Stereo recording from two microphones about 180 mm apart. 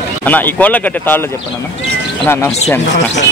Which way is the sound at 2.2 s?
15° left (ahead or behind).